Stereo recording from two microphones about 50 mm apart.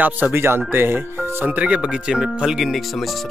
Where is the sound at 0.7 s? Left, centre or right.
Right.